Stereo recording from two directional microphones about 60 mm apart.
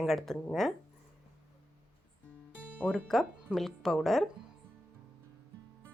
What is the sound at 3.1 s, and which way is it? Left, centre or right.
A woman's voice, centre.